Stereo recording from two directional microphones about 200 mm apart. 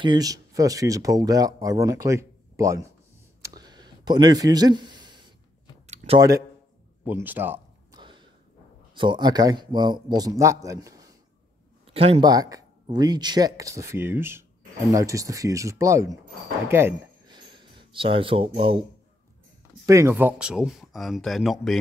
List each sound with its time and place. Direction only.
0.0 s speech: 20° right (ahead or behind)
3.4 s a sound: 20° right (ahead or behind)
7.1 s speech: 10° right (ahead or behind)
7.9 s a sound: 25° right (ahead or behind)
8.9 s a man's voice: 25° right (ahead or behind)
11.8 s speech: 30° right (ahead or behind)
12.3 s speech: 20° right (ahead or behind)
19.9 s speech: 15° right (ahead or behind)